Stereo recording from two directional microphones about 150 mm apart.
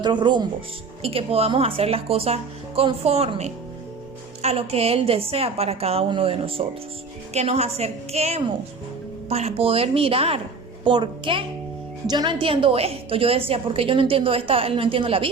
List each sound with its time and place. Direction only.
0.0 s speech: 30° right (ahead or behind)
1.0 s a woman's voice: 40° right (ahead or behind)